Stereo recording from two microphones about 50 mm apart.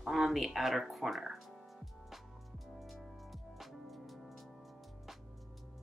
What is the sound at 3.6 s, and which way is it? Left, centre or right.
Music, centre.